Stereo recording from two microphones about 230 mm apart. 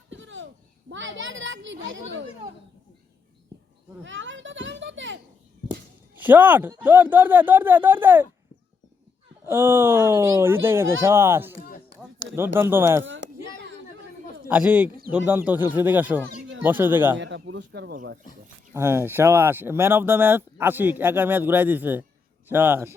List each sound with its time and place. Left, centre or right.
0.1 s a sound: right
0.9 s a child's voice: right
4.0 s a child's voice: right
6.1 s speech: centre
9.5 s speech: centre
12.2 s speech: right
12.5 s speech: centre
13.1 s a sound: right
14.4 s speech: centre
17.2 s a child's voice: right
18.7 s speech: centre